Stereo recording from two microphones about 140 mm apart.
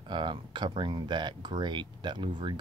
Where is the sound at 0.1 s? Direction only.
35° right (ahead or behind).